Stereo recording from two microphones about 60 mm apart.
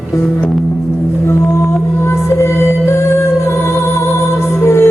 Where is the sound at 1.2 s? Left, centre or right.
Left.